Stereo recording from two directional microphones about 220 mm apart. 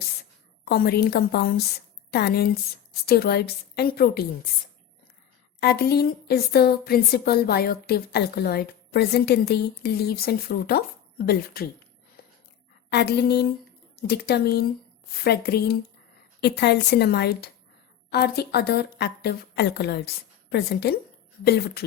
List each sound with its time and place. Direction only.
0.6 s a woman's voice: 45° left (ahead or behind)
5.5 s speech: 45° left (ahead or behind)
12.9 s speech: 50° left (ahead or behind)